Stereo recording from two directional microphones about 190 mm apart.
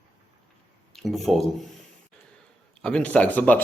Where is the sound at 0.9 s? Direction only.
Centre (ahead or behind).